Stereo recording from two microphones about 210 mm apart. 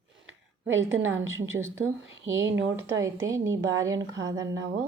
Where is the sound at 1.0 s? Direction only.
70° right (ahead or behind).